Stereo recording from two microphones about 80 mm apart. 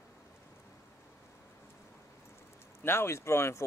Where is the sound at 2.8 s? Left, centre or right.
Left.